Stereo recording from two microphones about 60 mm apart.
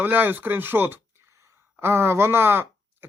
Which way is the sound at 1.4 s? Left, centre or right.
Right.